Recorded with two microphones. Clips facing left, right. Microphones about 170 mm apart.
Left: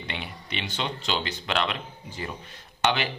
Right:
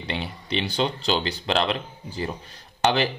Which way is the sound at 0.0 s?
35° right (ahead or behind).